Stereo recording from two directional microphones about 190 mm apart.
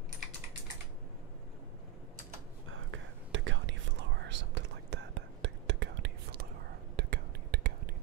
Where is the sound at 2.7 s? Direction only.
90° right; by 7.7 s 55° right (ahead or behind).